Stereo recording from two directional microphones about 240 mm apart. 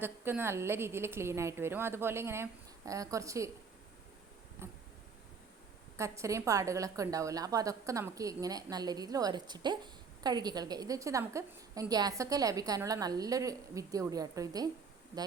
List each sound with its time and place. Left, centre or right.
0.0 s a woman's voice: centre
4.6 s a sound: centre
6.0 s a woman's voice: centre